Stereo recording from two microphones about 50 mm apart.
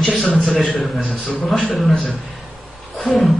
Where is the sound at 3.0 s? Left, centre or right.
Centre.